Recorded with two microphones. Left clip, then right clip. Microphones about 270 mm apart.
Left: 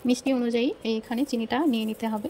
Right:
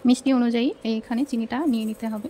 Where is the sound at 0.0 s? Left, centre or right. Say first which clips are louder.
Right 4 dB; centre.